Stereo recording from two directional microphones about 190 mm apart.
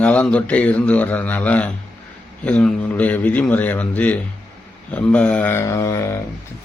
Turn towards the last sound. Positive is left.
turn(degrees=15)  # may be behind; listen again after turning